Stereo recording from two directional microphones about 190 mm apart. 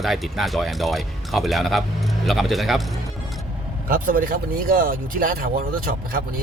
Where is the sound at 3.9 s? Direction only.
45° right (ahead or behind).